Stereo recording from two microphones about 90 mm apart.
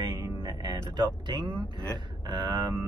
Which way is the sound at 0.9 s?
60° right (ahead or behind).